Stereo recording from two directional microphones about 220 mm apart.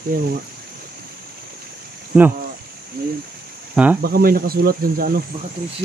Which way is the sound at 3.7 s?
5° right (ahead or behind).